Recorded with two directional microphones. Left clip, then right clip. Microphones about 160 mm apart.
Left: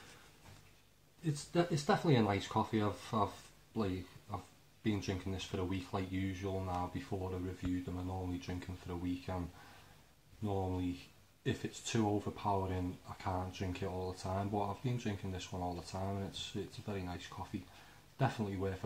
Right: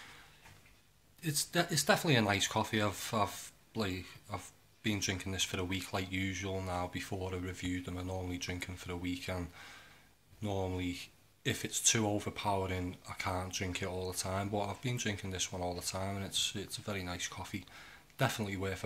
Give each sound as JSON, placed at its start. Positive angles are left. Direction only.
{"t": 1.2, "sound": "speech", "side_deg": -15}
{"t": 10.4, "sound": "speech", "side_deg": -20}